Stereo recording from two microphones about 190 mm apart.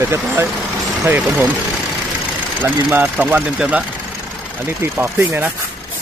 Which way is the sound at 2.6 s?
10° right (ahead or behind).